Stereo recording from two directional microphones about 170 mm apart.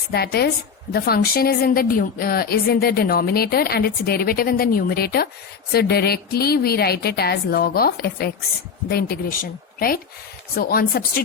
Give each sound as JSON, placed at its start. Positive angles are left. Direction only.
{"t": 0.1, "sound": "a woman's voice", "side_deg": 65}